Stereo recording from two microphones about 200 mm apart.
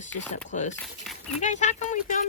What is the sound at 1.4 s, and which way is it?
Speech, 35° left (ahead or behind).